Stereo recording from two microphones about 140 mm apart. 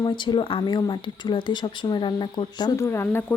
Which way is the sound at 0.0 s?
35° left (ahead or behind).